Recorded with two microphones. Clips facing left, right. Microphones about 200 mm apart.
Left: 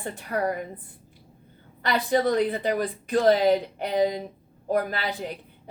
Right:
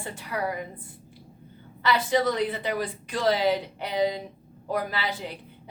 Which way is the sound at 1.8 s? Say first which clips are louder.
Left 1 dB; 55° left (ahead or behind).